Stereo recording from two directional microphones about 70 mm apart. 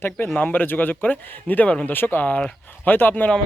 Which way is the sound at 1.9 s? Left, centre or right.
Left.